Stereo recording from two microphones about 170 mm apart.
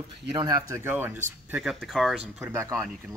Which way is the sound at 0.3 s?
20° right (ahead or behind).